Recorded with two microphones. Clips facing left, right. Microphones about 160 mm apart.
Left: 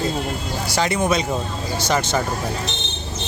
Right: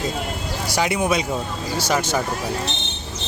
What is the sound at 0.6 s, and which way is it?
Speech, 10° right (ahead or behind).